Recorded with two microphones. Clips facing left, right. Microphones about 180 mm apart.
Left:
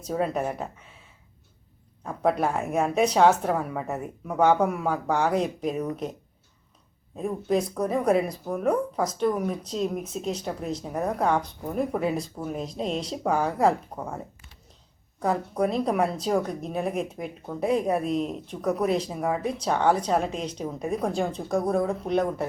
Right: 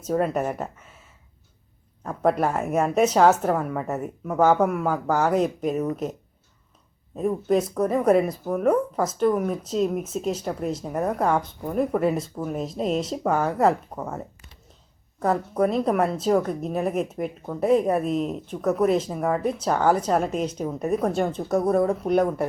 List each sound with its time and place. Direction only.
0.1 s a woman's voice: centre (ahead or behind)
2.0 s a woman's voice: centre (ahead or behind)
7.2 s a woman's voice: centre (ahead or behind)
15.2 s a woman's voice: centre (ahead or behind)